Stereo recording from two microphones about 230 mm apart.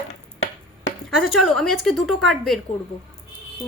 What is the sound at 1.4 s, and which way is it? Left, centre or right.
Speech, centre.